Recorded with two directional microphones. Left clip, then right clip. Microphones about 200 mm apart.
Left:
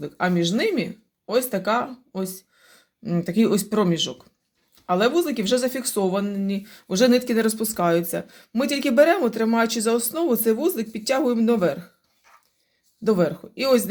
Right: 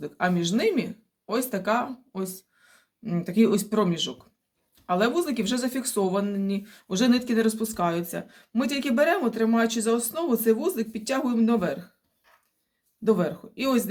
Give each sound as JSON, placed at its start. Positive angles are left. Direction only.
{"t": 0.0, "sound": "speech", "side_deg": 30}
{"t": 13.1, "sound": "speech", "side_deg": 40}